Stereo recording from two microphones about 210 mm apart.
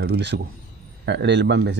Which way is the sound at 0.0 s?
50° right (ahead or behind).